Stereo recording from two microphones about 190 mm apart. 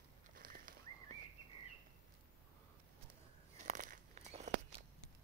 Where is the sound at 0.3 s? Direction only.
50° right (ahead or behind).